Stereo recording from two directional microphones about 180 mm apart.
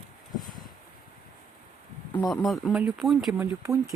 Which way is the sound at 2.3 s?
Centre (ahead or behind).